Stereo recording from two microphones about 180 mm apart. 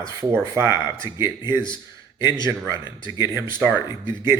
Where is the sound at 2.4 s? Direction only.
15° right (ahead or behind).